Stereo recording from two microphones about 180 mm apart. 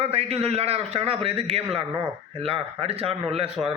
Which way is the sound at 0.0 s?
35° right (ahead or behind).